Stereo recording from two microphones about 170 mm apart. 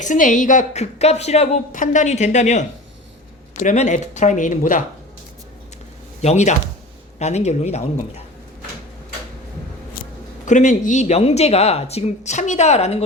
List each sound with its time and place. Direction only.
0.0 s a woman's voice: 50° left (ahead or behind)
6.2 s a woman's voice: 40° left (ahead or behind)
10.4 s speech: 45° left (ahead or behind)